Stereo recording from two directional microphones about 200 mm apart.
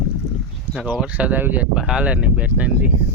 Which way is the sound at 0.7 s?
5° right (ahead or behind).